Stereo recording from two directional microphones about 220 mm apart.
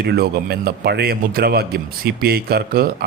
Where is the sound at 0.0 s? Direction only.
45° right (ahead or behind).